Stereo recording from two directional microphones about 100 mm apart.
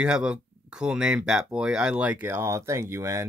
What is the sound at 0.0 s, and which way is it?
Speech, 10° right (ahead or behind).